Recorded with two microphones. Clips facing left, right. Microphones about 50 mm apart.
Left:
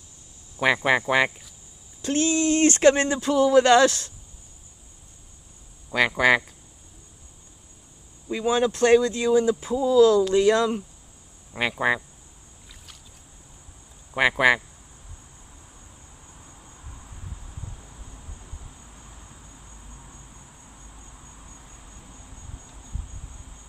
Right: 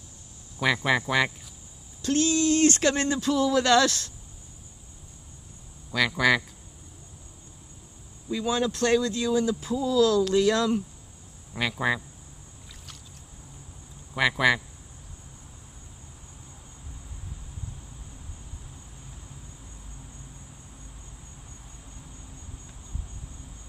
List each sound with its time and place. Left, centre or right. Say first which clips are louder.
0.6 s speech: left 3 dB; left
5.9 s speech: left 3 dB; left
8.3 s speech: left 4 dB; left
14.1 s speech: left 3 dB; left